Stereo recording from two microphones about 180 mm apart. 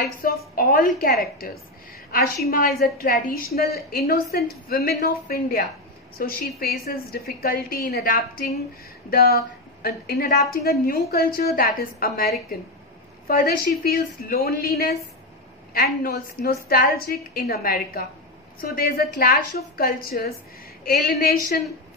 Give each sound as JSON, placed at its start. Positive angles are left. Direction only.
{"t": 0.2, "sound": "a woman's voice", "side_deg": 50}